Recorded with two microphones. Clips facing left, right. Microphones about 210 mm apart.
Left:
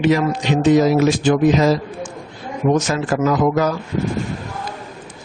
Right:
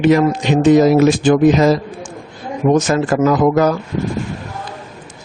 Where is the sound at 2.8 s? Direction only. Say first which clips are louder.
Right 4 dB; 50° right (ahead or behind).